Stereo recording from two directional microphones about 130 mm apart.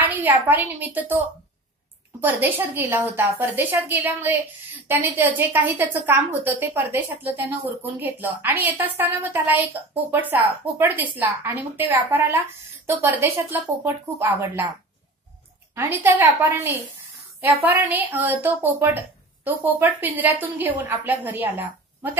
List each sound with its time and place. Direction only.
0.0 s a woman's voice: 15° right (ahead or behind)
15.7 s a woman's voice: 20° right (ahead or behind)